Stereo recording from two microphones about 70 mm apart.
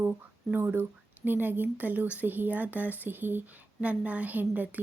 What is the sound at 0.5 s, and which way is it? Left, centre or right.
Speech, right.